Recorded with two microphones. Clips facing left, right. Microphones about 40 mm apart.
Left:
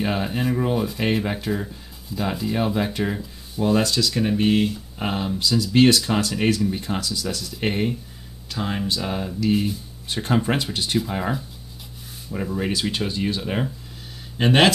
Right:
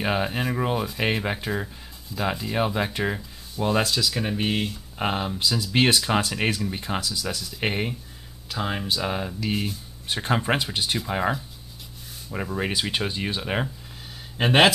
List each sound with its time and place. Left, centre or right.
0.0 s speech: centre